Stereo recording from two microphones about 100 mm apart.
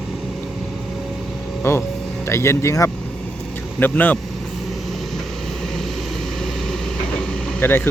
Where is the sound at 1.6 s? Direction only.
25° left (ahead or behind).